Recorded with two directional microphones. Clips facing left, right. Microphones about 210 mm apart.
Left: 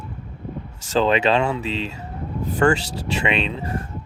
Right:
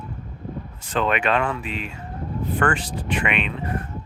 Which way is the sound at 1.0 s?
30° left (ahead or behind).